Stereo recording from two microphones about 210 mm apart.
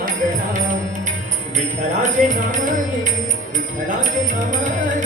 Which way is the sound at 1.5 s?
35° right (ahead or behind).